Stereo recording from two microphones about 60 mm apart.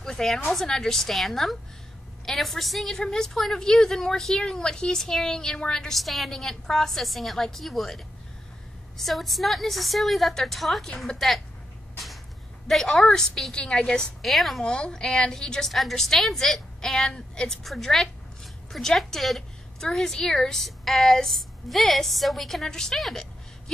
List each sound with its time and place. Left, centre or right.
0.0 s a sound: centre
0.5 s a woman's voice: centre
12.6 s a woman's voice: centre
14.2 s a woman's voice: centre
14.6 s a woman's voice: centre